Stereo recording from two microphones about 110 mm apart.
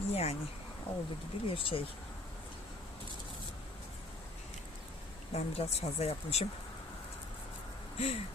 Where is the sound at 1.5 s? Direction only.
55° left (ahead or behind).